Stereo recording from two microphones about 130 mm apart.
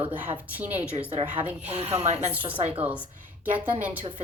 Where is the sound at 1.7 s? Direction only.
50° right (ahead or behind).